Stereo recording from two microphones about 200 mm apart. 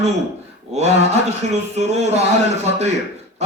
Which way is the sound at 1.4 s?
35° right (ahead or behind).